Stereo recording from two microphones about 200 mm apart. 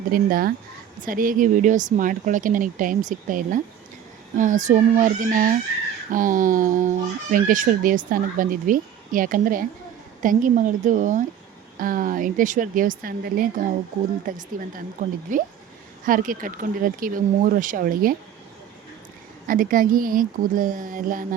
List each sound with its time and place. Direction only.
0.1 s a child's voice: 45° right (ahead or behind)
19.5 s a child's voice: 45° right (ahead or behind)